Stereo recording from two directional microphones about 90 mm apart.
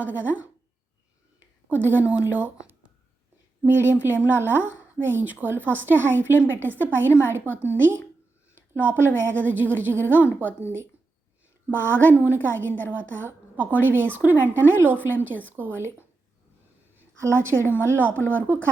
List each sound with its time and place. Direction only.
0.0 s a woman's voice: 20° right (ahead or behind)
1.7 s a woman's voice: 20° right (ahead or behind)
3.6 s a woman's voice: 25° right (ahead or behind)
8.5 s a woman's voice: 20° right (ahead or behind)
17.2 s a woman's voice: 30° right (ahead or behind)